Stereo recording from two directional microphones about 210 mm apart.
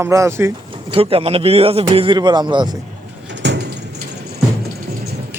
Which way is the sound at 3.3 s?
55° right (ahead or behind).